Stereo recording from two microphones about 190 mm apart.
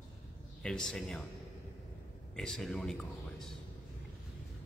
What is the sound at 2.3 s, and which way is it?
A man's voice, 5° left (ahead or behind).